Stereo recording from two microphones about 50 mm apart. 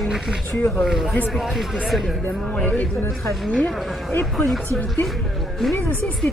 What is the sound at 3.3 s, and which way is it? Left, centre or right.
Speech, centre.